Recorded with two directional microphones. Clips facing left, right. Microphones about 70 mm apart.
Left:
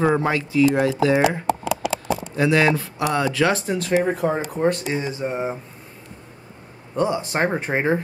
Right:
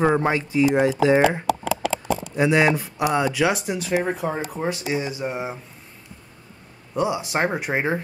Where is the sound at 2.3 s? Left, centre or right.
Centre.